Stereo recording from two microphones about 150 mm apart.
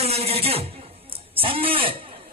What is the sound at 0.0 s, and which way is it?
A man's voice, 45° right (ahead or behind).